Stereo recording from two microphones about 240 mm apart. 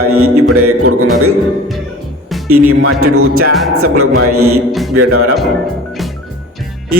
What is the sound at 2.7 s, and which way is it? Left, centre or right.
Music, right.